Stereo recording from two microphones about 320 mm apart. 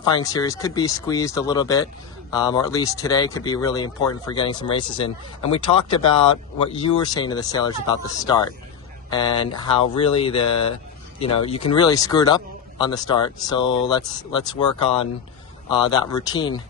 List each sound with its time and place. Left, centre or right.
0.0 s speech: centre
15.7 s speech: centre